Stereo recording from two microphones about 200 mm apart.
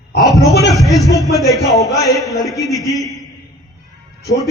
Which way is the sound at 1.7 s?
Centre (ahead or behind).